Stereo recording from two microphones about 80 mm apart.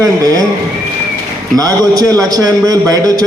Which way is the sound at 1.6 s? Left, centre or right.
Right.